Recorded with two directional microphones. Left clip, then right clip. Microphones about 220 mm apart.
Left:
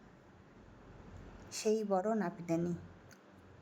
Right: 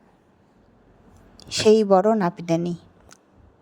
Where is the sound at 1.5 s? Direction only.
40° right (ahead or behind).